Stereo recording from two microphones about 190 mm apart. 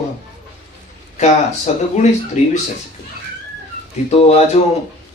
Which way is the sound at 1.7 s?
35° left (ahead or behind).